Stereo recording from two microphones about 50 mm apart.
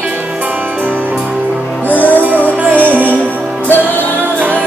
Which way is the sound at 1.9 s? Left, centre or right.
Left.